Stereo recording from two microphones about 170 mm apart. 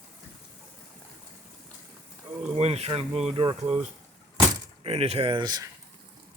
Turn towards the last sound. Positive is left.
turn(degrees=-25)  # may be behind; listen again after turning